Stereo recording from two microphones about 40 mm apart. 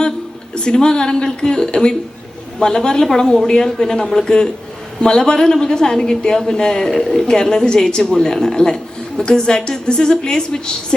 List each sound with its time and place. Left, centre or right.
0.5 s a woman's voice: left